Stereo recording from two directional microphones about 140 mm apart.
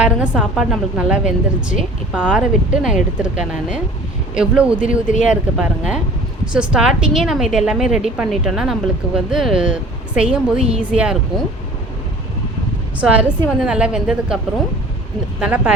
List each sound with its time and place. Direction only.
0.0 s a woman's voice: 10° right (ahead or behind)
13.0 s speech: 10° right (ahead or behind)
15.4 s speech: 10° right (ahead or behind)